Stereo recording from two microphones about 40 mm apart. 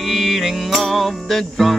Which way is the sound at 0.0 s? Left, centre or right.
Centre.